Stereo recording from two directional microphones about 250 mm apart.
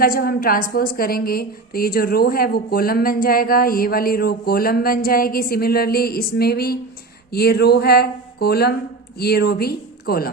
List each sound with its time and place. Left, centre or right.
0.0 s a woman's voice: left